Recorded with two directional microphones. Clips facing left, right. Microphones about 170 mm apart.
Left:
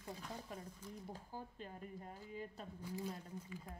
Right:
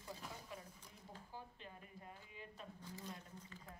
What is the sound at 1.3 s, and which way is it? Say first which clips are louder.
Speech: left 5 dB; 40° left (ahead or behind).